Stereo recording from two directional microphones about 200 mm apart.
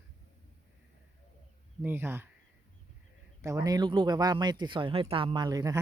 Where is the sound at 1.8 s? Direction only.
10° right (ahead or behind).